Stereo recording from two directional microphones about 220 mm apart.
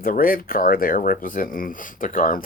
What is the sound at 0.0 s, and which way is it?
Speech, 40° left (ahead or behind).